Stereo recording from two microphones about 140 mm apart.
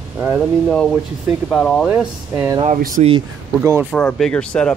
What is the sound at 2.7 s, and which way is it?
Speech, 70° right (ahead or behind).